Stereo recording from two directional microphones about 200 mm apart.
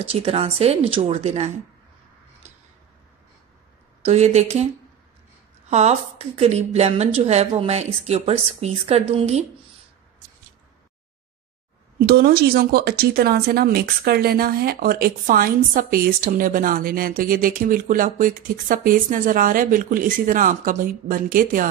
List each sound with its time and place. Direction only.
0.0 s speech: 30° right (ahead or behind)
4.0 s a woman's voice: 35° right (ahead or behind)
5.7 s a woman's voice: 35° right (ahead or behind)
12.0 s speech: 50° right (ahead or behind)